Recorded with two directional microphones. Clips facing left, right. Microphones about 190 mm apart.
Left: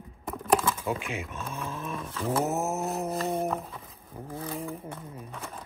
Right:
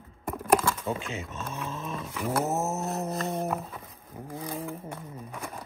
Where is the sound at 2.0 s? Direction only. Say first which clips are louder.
Left 1 dB; 15° right (ahead or behind).